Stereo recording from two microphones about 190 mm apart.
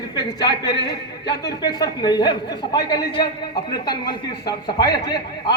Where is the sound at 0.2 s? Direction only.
25° left (ahead or behind).